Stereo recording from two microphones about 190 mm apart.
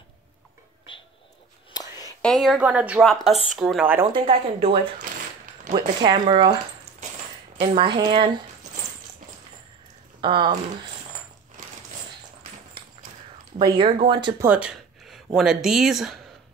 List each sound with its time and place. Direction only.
1.7 s whispering: 20° left (ahead or behind)
2.2 s a woman's voice: centre (ahead or behind)
4.0 s speech: 25° right (ahead or behind)
6.0 s speech: 25° right (ahead or behind)
7.6 s speech: 25° right (ahead or behind)
10.2 s speech: 25° right (ahead or behind)
13.6 s speech: 25° right (ahead or behind)
14.4 s a sound: 5° right (ahead or behind)
15.3 s a woman's voice: centre (ahead or behind)